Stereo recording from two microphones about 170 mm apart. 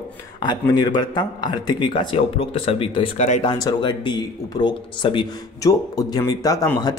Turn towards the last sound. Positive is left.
turn(degrees=20)  # may be behind; listen again after turning